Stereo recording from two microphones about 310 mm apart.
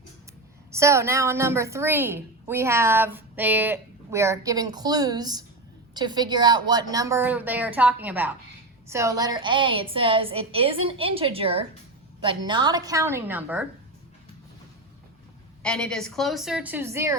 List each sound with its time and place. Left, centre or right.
0.7 s a woman's voice: centre
15.6 s a woman's voice: centre